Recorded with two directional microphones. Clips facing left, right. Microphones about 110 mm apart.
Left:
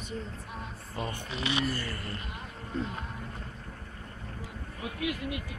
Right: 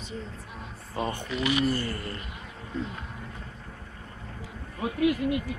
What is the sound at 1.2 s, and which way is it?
Speech, 30° left (ahead or behind).